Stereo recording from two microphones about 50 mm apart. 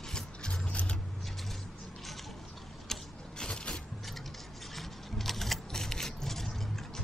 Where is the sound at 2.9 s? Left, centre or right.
Centre.